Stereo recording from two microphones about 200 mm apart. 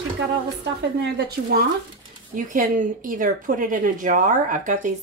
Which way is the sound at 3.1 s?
40° right (ahead or behind).